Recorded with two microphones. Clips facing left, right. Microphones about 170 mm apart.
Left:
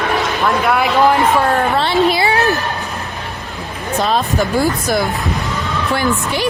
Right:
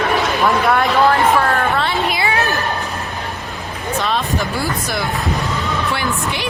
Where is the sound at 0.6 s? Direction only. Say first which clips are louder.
Even; 5° left (ahead or behind).